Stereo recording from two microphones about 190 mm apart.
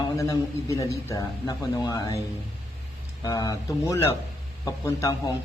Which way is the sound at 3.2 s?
20° left (ahead or behind).